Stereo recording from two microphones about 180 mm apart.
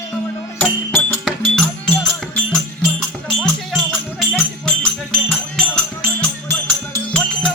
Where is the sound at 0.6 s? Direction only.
10° left (ahead or behind).